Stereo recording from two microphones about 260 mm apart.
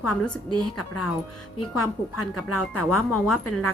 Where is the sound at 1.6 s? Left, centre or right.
Left.